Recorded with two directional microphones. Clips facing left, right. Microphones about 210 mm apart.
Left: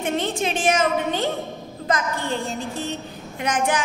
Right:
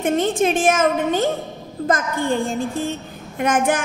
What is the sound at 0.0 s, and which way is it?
A woman's voice, 50° right (ahead or behind).